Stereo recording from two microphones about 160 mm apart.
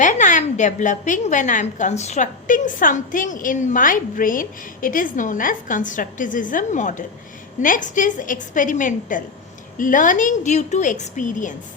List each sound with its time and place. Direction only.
0.0 s a woman's voice: 50° left (ahead or behind)